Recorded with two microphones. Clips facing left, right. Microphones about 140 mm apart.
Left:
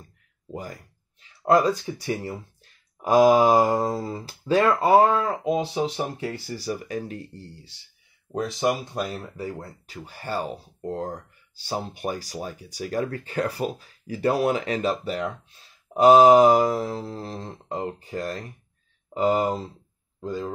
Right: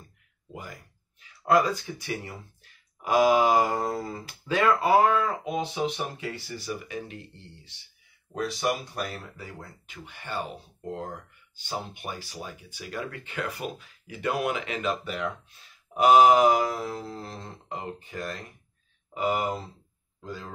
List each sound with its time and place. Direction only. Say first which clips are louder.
0.5 s speech: left 6 dB; 40° left (ahead or behind)
8.5 s speech: left 4 dB; 20° left (ahead or behind)
9.4 s speech: left 9 dB; 35° left (ahead or behind)
20.2 s speech: left 9 dB; 30° left (ahead or behind)